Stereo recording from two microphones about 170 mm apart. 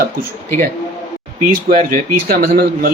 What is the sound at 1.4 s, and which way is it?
A man's voice, 55° right (ahead or behind).